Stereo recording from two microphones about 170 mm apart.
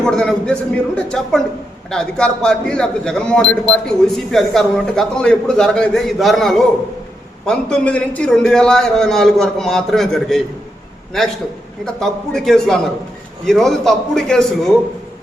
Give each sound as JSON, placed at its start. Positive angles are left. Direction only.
{"t": 0.0, "sound": "speech", "side_deg": 5}